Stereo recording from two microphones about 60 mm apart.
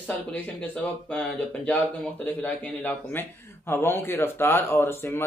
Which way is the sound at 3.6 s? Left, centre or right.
Left.